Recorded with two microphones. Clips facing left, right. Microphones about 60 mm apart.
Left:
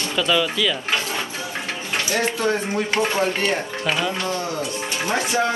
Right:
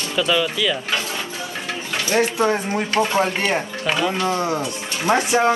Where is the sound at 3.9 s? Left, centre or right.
Centre.